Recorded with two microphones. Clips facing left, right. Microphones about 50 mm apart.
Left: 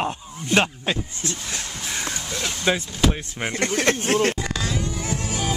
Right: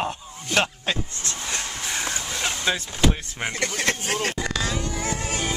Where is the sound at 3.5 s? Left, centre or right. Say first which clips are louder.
Left 5 dB; left.